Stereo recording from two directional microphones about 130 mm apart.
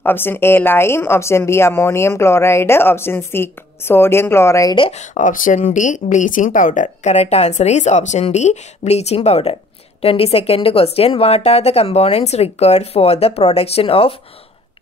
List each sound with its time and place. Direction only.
0.0 s speech: 15° left (ahead or behind)
4.9 s speech: 80° left; by 14.1 s 45° left (ahead or behind)